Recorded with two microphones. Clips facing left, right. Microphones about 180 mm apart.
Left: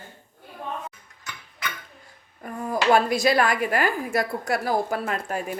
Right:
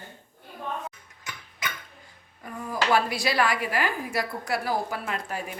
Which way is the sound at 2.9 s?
45° left (ahead or behind).